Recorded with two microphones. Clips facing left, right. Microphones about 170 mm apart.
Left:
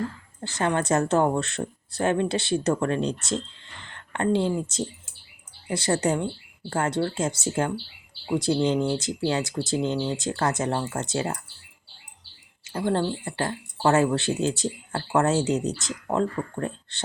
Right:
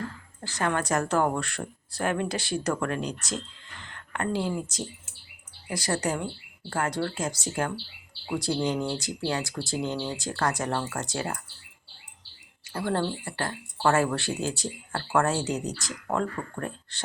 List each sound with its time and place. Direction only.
0.4 s speech: 25° left (ahead or behind)
12.6 s speech: 20° left (ahead or behind)